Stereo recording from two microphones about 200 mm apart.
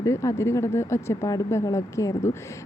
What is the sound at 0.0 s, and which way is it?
Speech, 15° left (ahead or behind).